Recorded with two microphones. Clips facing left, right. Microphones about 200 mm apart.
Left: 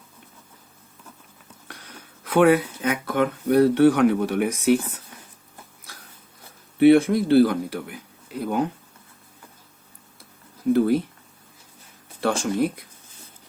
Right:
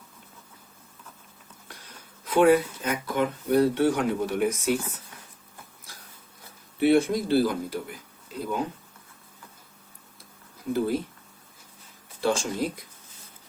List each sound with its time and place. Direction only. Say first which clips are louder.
2.2 s speech: left 2 dB; 65° left (ahead or behind)
6.7 s speech: left 6 dB; 60° left (ahead or behind)
10.7 s speech: left 7 dB; 65° left (ahead or behind)
12.2 s speech: left 4 dB; 60° left (ahead or behind)